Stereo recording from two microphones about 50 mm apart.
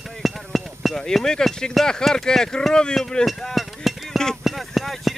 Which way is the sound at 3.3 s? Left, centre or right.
Centre.